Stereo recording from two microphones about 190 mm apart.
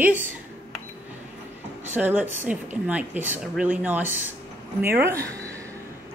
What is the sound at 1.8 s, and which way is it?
Speech, 10° right (ahead or behind).